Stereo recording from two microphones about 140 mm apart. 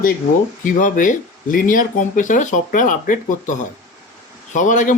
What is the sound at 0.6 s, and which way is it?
Speech, 70° left (ahead or behind).